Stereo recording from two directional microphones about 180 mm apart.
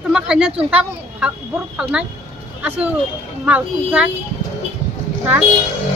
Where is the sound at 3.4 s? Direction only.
5° right (ahead or behind).